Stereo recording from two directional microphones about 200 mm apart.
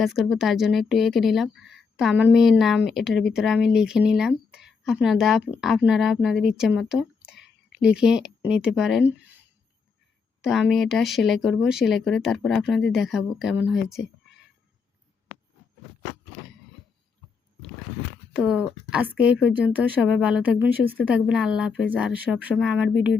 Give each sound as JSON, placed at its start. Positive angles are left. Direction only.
{"t": 0.0, "sound": "speech", "side_deg": 0}
{"t": 10.4, "sound": "speech", "side_deg": -5}
{"t": 18.3, "sound": "speech", "side_deg": -5}
{"t": 19.3, "sound": "speech", "side_deg": 65}
{"t": 19.6, "sound": "speech", "side_deg": -5}